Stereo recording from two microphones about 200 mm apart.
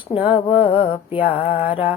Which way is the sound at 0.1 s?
25° left (ahead or behind).